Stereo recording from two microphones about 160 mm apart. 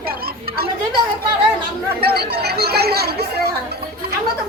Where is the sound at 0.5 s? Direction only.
70° right (ahead or behind).